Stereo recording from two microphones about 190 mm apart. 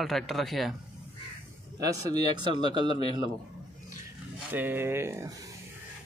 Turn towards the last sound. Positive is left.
turn(degrees=-15)  # may be behind; listen again after turning